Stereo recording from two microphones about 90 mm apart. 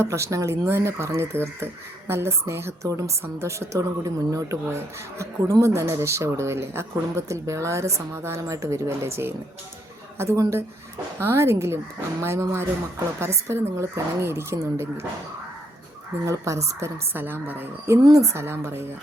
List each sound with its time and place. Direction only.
0.0 s speech: 35° right (ahead or behind)
16.2 s speech: 35° right (ahead or behind)
17.2 s speech: 20° right (ahead or behind)